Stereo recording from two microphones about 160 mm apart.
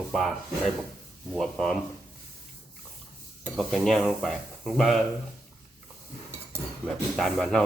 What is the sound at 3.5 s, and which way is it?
Speech, centre (ahead or behind).